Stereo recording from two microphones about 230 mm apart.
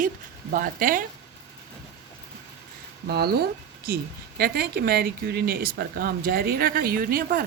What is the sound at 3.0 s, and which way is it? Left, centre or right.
A woman's voice, right.